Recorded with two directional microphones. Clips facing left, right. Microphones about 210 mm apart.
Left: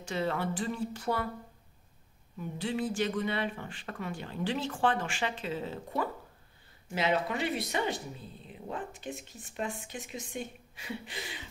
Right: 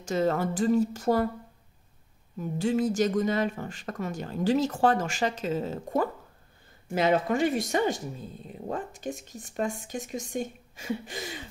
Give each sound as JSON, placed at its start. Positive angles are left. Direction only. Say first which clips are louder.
{"t": 0.0, "sound": "speech", "louder": "right 6 dB", "side_deg": -45}
{"t": 2.3, "sound": "speech", "louder": "right 7 dB", "side_deg": -45}